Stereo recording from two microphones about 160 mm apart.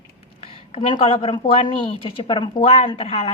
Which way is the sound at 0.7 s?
40° left (ahead or behind).